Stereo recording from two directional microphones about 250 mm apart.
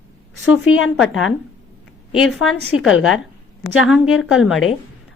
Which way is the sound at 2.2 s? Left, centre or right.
Centre.